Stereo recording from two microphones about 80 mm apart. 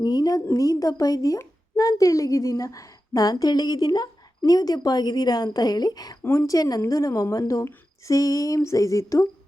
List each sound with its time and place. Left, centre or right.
0.0 s a woman's voice: left
6.2 s a woman's voice: left